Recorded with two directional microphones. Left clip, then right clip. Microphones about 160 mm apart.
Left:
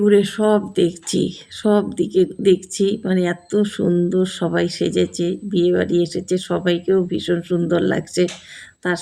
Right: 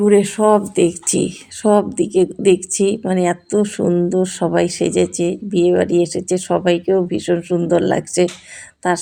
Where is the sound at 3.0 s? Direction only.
15° right (ahead or behind).